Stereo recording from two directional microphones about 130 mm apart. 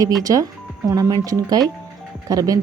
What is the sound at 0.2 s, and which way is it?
Speech, 25° right (ahead or behind).